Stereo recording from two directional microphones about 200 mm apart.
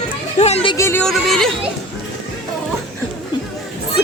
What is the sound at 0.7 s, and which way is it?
Speech, 10° left (ahead or behind).